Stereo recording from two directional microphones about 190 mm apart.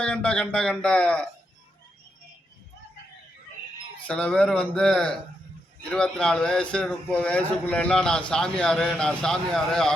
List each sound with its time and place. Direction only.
0.0 s a man's voice: 5° left (ahead or behind)
4.0 s a man's voice: 5° left (ahead or behind)